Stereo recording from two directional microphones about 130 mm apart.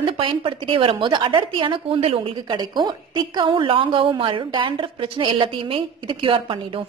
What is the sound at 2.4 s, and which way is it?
A woman's voice, 35° right (ahead or behind).